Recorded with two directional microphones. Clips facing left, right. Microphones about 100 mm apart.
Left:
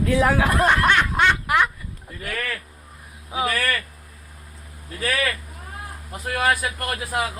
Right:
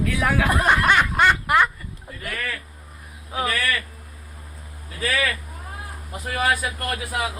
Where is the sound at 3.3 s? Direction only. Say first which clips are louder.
Left 1 dB; 10° left (ahead or behind).